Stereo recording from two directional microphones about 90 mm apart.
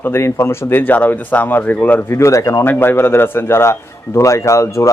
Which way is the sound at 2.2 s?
35° left (ahead or behind).